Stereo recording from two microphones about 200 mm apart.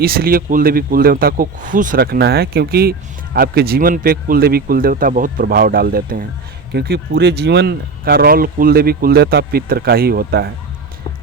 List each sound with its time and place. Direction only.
0.0 s speech: 50° right (ahead or behind)